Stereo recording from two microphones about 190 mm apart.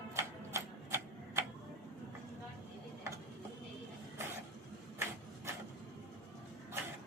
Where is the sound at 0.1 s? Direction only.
15° right (ahead or behind).